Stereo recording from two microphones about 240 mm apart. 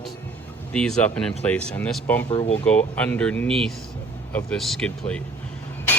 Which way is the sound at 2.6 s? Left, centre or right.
Centre.